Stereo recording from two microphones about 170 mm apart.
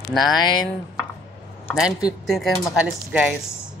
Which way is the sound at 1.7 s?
5° right (ahead or behind).